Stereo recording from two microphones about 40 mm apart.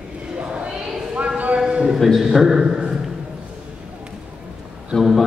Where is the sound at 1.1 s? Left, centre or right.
Right.